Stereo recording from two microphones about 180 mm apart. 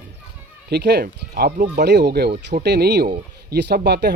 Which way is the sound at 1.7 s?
65° right (ahead or behind).